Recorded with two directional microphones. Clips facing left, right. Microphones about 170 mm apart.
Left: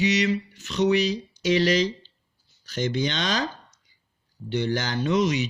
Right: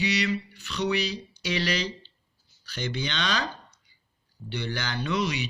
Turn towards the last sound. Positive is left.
turn(degrees=40)  # may be behind; listen again after turning